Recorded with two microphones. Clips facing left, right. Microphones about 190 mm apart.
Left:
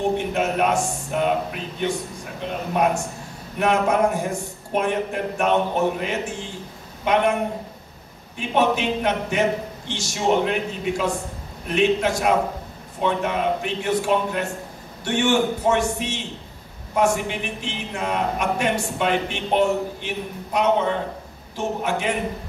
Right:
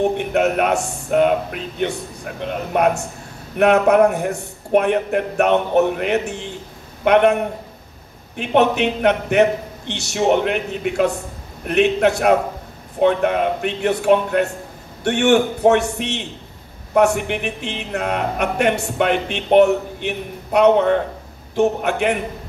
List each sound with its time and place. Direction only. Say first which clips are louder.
0.2 s a man's voice: right 4 dB; 65° right (ahead or behind)
8.4 s a man's voice: right 4 dB; 65° right (ahead or behind)